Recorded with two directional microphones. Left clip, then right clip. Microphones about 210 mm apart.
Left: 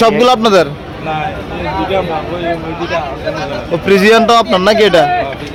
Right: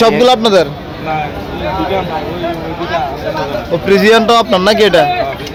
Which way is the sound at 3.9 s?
10° left (ahead or behind).